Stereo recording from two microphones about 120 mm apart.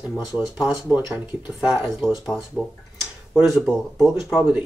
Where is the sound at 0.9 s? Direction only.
35° left (ahead or behind).